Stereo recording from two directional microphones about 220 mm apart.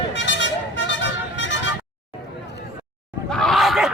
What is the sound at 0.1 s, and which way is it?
Vehicle, 55° left (ahead or behind).